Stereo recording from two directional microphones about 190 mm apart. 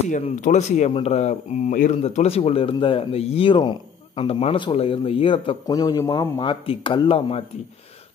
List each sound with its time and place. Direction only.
0.0 s speech: 40° left (ahead or behind)